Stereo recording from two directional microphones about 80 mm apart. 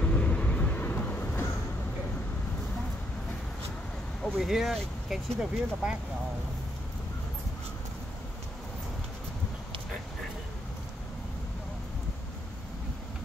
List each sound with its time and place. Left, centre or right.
0.0 s vehicle: centre
4.2 s speech: centre